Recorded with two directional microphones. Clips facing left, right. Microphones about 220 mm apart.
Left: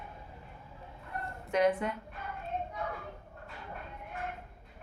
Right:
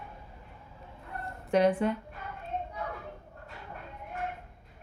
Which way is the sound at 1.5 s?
30° right (ahead or behind).